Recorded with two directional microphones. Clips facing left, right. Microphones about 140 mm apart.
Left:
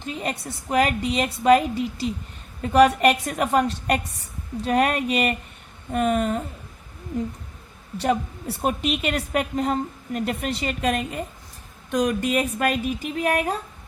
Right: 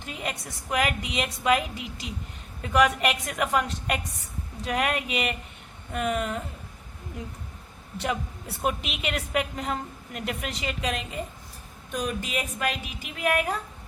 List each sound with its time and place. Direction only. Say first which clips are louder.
0.2 s a woman's voice: left 5 dB; 35° left (ahead or behind)
7.9 s a woman's voice: left 7 dB; 35° left (ahead or behind)
11.9 s speech: left 8 dB; 70° left (ahead or behind); by 13.6 s 40° left (ahead or behind)